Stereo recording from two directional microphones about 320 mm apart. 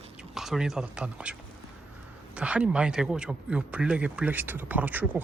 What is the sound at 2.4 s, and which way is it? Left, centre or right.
A man's voice, centre.